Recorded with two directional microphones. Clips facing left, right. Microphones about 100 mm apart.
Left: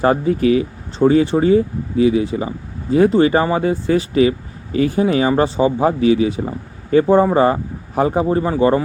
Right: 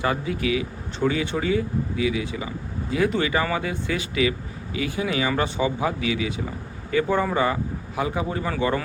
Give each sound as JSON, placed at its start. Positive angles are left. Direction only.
{"t": 0.0, "sound": "speech", "side_deg": 40}